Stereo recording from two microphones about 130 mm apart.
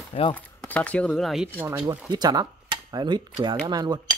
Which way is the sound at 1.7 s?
25° right (ahead or behind).